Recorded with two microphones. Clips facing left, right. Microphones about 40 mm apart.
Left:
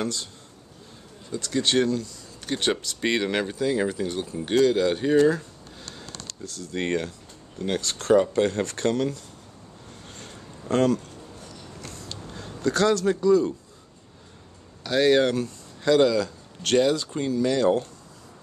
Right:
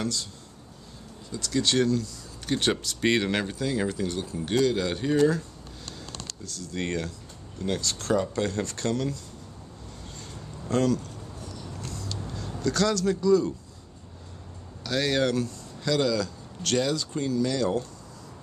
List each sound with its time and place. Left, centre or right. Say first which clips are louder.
0.0 s speech: left 2 dB; left
1.3 s speech: left 2 dB; left
5.9 s a sound: left 1 dB; left
7.6 s speech: left 3 dB; left
10.0 s a sound: even; left
14.8 s speech: left 6 dB; centre